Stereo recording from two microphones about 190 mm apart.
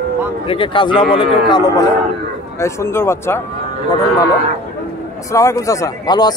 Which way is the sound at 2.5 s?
15° left (ahead or behind).